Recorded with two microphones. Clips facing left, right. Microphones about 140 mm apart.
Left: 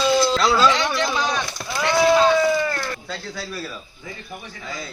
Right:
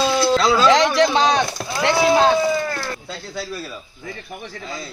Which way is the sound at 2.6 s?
5° right (ahead or behind).